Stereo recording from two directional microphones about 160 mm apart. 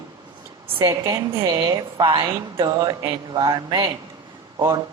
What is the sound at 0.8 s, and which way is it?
A woman's voice, 20° right (ahead or behind).